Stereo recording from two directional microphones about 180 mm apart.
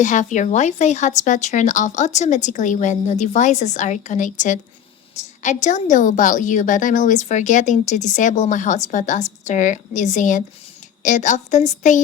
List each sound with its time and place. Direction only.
0.0 s a woman's voice: 45° left (ahead or behind)